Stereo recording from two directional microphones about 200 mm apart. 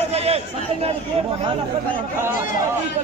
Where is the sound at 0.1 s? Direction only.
30° right (ahead or behind).